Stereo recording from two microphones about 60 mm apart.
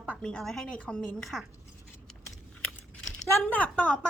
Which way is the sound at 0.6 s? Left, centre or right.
Centre.